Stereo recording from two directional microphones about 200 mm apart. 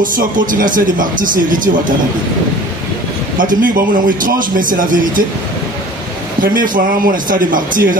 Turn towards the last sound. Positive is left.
turn(degrees=-40)  # may be behind; listen again after turning